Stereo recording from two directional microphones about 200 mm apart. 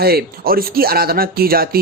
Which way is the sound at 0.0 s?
50° right (ahead or behind).